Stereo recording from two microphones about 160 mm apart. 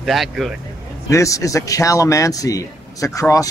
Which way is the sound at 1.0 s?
20° left (ahead or behind).